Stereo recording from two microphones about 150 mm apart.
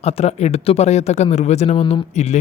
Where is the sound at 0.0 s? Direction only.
45° left (ahead or behind).